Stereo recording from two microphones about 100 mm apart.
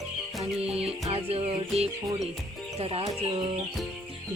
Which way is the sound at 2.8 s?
70° right (ahead or behind).